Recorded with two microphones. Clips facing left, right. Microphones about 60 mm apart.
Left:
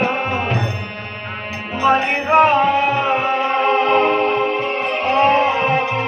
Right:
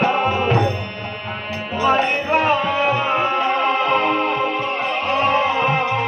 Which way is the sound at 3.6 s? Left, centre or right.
Left.